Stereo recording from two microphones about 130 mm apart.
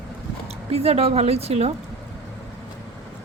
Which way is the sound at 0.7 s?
50° right (ahead or behind).